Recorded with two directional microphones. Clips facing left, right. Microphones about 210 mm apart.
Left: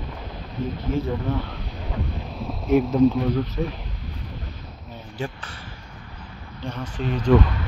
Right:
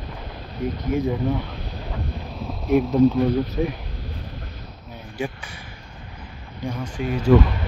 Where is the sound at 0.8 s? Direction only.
15° right (ahead or behind).